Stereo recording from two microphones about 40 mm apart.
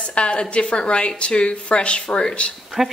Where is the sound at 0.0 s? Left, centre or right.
Left.